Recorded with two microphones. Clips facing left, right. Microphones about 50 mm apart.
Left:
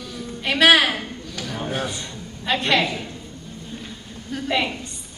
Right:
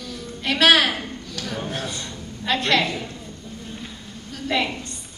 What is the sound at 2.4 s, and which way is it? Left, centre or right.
Speech, centre.